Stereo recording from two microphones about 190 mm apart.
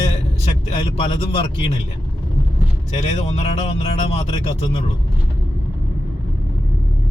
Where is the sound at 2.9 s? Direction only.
35° left (ahead or behind).